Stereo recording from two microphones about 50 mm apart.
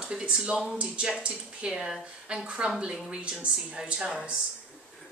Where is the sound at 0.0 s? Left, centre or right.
Centre.